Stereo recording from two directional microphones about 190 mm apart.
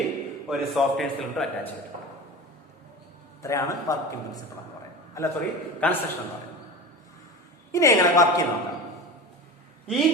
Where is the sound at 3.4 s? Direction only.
15° left (ahead or behind).